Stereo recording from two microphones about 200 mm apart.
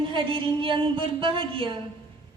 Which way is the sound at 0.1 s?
25° right (ahead or behind).